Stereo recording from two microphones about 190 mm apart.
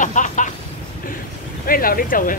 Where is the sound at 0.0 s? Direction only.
40° left (ahead or behind).